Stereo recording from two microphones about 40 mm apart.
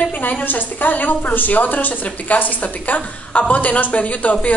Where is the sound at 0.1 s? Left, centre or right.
Left.